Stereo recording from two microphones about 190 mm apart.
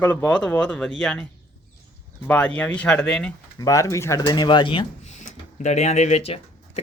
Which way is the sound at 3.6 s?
15° left (ahead or behind).